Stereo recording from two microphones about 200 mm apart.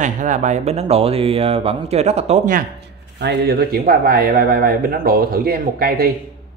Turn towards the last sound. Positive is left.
turn(degrees=-50)  # may be behind; listen again after turning